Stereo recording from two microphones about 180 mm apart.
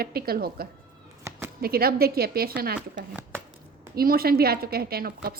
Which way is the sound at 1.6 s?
60° right (ahead or behind).